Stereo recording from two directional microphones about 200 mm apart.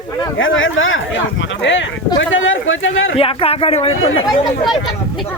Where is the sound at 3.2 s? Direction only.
30° left (ahead or behind).